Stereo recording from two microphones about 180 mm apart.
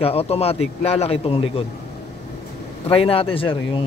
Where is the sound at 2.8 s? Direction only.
30° left (ahead or behind).